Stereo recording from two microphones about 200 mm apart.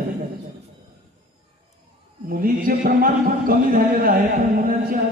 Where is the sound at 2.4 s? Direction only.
45° right (ahead or behind).